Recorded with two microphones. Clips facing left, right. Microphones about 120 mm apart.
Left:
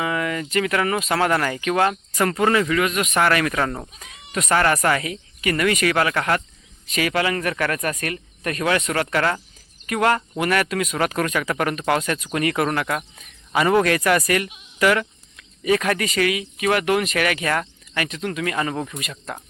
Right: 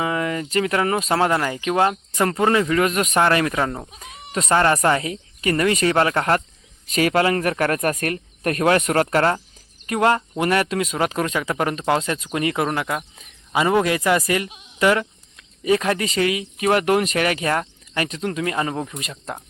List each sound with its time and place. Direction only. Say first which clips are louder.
0.0 s speech: right 1 dB; 30° right (ahead or behind)
2.7 s speech: right 2 dB; 35° right (ahead or behind)
3.2 s speech: right 1 dB; 25° right (ahead or behind)
4.3 s speech: right 1 dB; 25° right (ahead or behind)